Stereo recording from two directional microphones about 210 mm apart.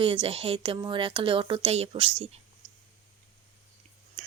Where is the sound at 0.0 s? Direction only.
25° right (ahead or behind).